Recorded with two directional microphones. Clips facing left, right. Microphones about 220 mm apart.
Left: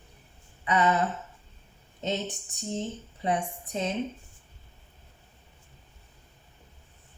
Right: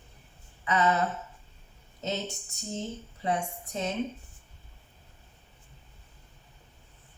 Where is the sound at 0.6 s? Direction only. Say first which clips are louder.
Left 1 dB; 20° left (ahead or behind).